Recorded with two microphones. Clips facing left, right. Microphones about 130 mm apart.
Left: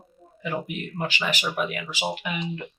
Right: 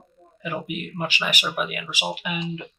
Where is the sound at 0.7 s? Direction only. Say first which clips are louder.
Right 1 dB; 20° right (ahead or behind).